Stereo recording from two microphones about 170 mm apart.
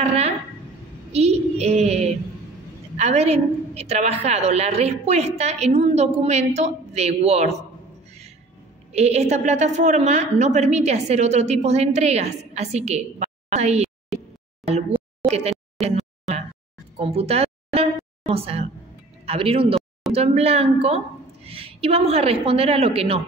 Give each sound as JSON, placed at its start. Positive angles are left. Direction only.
{"t": 0.0, "sound": "a woman's voice", "side_deg": -40}
{"t": 1.1, "sound": "child singing", "side_deg": -40}
{"t": 3.0, "sound": "a woman's voice", "side_deg": -40}
{"t": 8.9, "sound": "a woman's voice", "side_deg": -40}
{"t": 15.8, "sound": "a sound", "side_deg": -40}
{"t": 17.0, "sound": "a woman's voice", "side_deg": -35}